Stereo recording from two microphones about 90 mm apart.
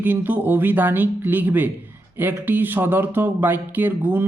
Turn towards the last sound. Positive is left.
turn(degrees=-20)  # may be behind; listen again after turning